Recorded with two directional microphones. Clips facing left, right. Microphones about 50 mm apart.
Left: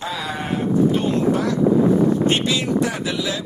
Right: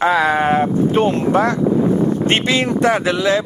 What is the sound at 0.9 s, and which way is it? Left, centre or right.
Speech, right.